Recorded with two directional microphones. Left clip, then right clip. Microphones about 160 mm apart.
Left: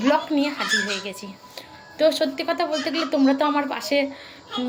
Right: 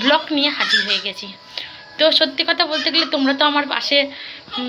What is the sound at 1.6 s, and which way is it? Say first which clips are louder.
A woman's voice: right 4 dB; 15° left (ahead or behind).